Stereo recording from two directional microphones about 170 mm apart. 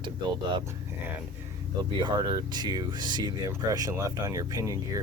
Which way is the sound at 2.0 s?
25° right (ahead or behind).